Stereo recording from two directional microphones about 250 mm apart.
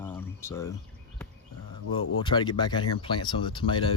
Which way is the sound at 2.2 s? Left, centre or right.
Centre.